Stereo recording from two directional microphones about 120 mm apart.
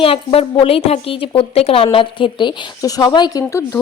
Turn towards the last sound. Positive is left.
turn(degrees=25)  # may be behind; listen again after turning